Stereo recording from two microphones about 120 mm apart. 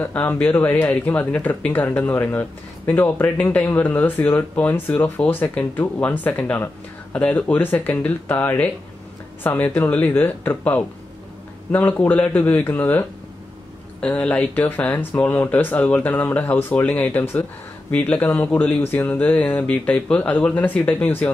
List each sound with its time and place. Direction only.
0.0 s speech: 15° left (ahead or behind)
14.0 s speech: 10° left (ahead or behind)